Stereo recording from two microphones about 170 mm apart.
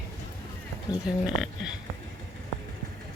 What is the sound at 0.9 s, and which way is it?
Speech, 25° left (ahead or behind).